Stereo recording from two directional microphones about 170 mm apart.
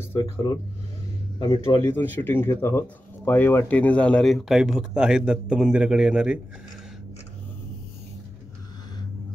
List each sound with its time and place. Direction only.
0.0 s speech: 15° left (ahead or behind)
1.4 s a man's voice: 30° left (ahead or behind)
2.0 s speech: 10° left (ahead or behind); by 6.4 s 5° right (ahead or behind)